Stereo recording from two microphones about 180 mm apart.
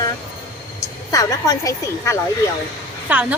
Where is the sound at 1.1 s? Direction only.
20° left (ahead or behind).